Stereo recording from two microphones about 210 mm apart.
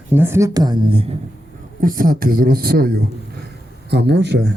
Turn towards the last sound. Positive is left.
turn(degrees=-55)  # may be behind; listen again after turning